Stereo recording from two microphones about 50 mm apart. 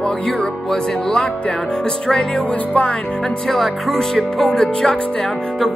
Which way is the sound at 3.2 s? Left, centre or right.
Centre.